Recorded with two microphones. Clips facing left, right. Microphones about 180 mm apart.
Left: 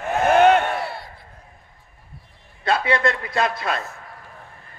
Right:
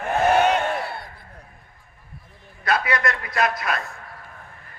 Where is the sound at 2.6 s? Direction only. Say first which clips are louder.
Left 3 dB; 30° left (ahead or behind).